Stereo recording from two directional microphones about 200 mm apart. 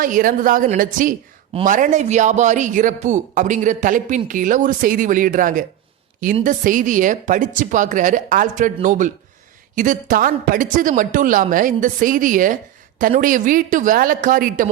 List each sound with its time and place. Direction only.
0.0 s a woman's voice: 45° right (ahead or behind)